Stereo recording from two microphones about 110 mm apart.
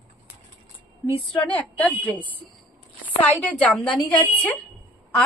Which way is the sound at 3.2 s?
15° left (ahead or behind).